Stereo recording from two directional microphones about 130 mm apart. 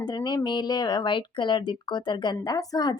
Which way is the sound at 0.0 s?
30° left (ahead or behind).